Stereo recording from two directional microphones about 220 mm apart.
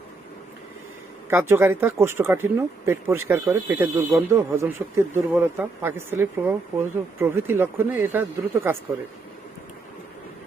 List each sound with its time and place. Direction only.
1.3 s speech: 10° right (ahead or behind)